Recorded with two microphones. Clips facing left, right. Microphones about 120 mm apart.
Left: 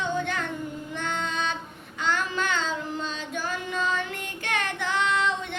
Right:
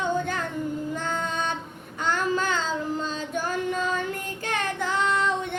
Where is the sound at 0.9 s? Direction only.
35° right (ahead or behind).